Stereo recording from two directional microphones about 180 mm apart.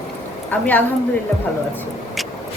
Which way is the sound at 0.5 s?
10° left (ahead or behind).